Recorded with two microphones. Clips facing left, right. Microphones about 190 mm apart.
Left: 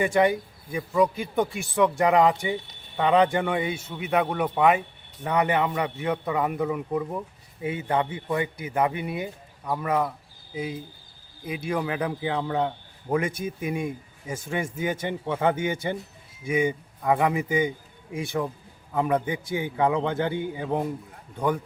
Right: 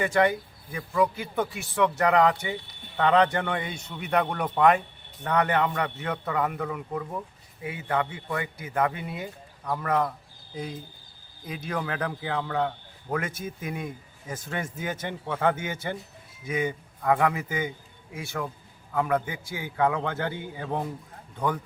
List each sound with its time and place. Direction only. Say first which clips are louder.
0.0 s a man's voice: left 2 dB; 15° left (ahead or behind)